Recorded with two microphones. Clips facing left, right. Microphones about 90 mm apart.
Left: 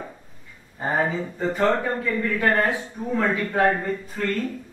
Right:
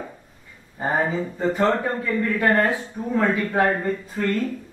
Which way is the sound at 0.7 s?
15° right (ahead or behind).